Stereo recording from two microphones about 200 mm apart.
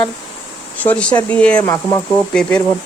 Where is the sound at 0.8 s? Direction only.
5° left (ahead or behind).